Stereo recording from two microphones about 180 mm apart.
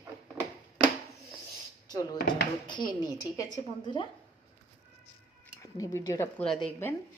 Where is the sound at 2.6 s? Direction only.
25° left (ahead or behind).